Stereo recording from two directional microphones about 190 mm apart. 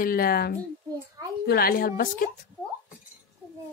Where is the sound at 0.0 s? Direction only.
50° left (ahead or behind).